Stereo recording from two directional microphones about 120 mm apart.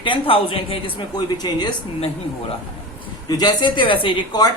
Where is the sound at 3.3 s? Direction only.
35° left (ahead or behind).